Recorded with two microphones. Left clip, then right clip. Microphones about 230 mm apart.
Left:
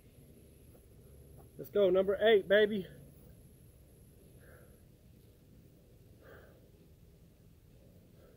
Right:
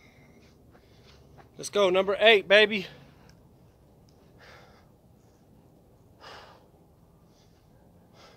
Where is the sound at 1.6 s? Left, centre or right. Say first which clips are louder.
Right 5 dB; right.